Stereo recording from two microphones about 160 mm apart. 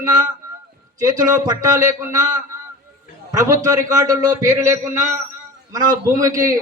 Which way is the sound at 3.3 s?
20° right (ahead or behind).